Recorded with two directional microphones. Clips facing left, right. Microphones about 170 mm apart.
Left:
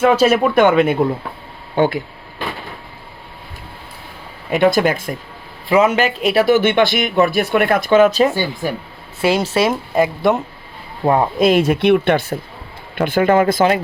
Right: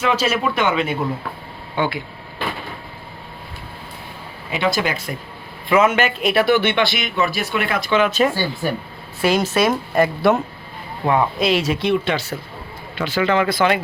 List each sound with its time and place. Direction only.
0.0 s speech: 50° left (ahead or behind)
4.5 s speech: 50° left (ahead or behind)
5.6 s speech: 40° left (ahead or behind)
8.2 s speech: 20° left (ahead or behind)
9.9 s speech: 15° left (ahead or behind)
11.0 s speech: 35° left (ahead or behind)
11.3 s speech: 50° left (ahead or behind)